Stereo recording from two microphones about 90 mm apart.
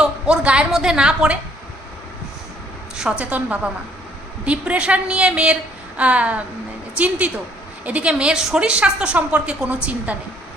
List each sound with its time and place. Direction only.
0.0 s a woman's voice: 10° right (ahead or behind)
2.9 s a woman's voice: 10° right (ahead or behind)